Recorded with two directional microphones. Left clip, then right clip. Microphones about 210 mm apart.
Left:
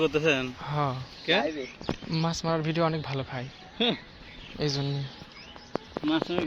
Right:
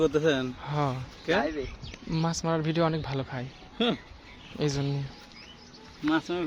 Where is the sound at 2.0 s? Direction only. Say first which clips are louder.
Right 1 dB; 15° right (ahead or behind).